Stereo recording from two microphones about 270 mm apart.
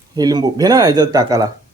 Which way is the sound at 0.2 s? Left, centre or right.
Centre.